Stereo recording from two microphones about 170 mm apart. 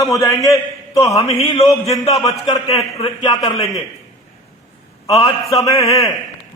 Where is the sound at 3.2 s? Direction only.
20° left (ahead or behind).